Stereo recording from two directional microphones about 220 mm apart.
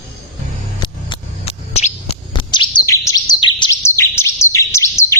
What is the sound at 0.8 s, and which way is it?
Bird, 25° left (ahead or behind).